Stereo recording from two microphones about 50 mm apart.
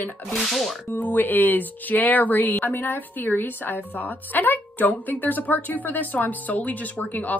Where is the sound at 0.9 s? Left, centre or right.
Left.